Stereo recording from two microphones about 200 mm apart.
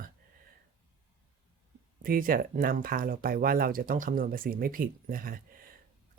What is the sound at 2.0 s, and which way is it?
Speech, 45° right (ahead or behind).